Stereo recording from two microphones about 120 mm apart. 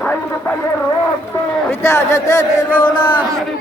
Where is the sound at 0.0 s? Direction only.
10° left (ahead or behind).